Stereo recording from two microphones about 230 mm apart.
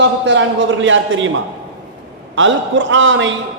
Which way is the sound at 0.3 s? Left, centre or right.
Right.